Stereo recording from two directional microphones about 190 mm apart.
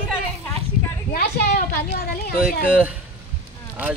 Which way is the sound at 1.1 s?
55° left (ahead or behind).